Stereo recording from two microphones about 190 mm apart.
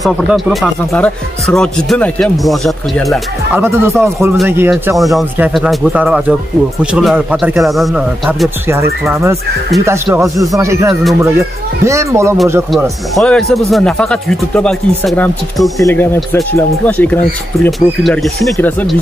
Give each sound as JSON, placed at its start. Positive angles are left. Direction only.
{"t": 0.0, "sound": "speech", "side_deg": 0}
{"t": 3.5, "sound": "speech", "side_deg": -10}
{"t": 4.9, "sound": "speech", "side_deg": 0}
{"t": 13.1, "sound": "speech", "side_deg": 5}